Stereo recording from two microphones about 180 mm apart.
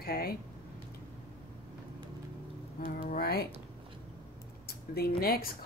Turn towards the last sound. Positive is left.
turn(degrees=55)  # may be behind; listen again after turning